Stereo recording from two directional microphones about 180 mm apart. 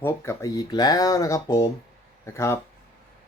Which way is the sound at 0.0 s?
15° left (ahead or behind).